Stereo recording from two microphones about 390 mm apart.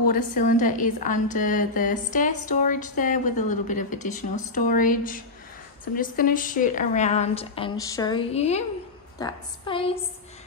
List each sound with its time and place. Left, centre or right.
0.1 s a woman's voice: centre